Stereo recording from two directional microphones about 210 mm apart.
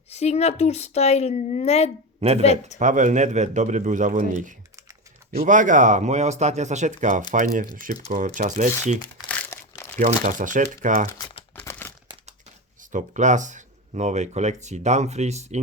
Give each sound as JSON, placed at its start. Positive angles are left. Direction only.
{"t": 0.1, "sound": "speech", "side_deg": 30}
{"t": 2.7, "sound": "speech", "side_deg": -35}
{"t": 9.3, "sound": "crumpling", "side_deg": 10}
{"t": 10.0, "sound": "speech", "side_deg": -35}
{"t": 11.5, "sound": "a sound", "side_deg": 10}
{"t": 12.9, "sound": "speech", "side_deg": -35}